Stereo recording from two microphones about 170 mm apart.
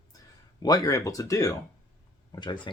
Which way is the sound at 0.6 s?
25° left (ahead or behind).